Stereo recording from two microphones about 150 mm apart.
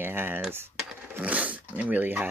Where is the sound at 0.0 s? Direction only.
15° right (ahead or behind).